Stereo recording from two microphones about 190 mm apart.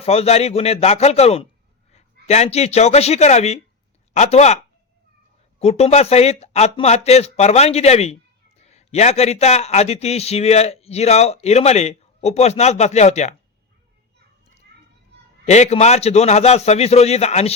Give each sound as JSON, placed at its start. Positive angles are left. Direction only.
{"t": 0.0, "sound": "a man's voice", "side_deg": 30}
{"t": 5.5, "sound": "a man's voice", "side_deg": 35}
{"t": 15.4, "sound": "a man's voice", "side_deg": 35}